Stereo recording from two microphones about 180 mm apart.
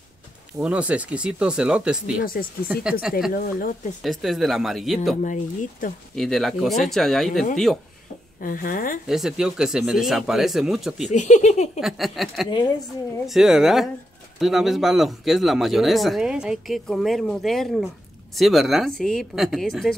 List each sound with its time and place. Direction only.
0.6 s speech: 5° right (ahead or behind)
3.3 s speech: 55° left (ahead or behind)
4.0 s speech: centre (ahead or behind)
5.2 s speech: 45° left (ahead or behind)
6.1 s speech: centre (ahead or behind)
8.4 s speech: 50° left (ahead or behind)
9.0 s speech: 5° right (ahead or behind)
11.1 s speech: 40° left (ahead or behind)
11.8 s speech: centre (ahead or behind)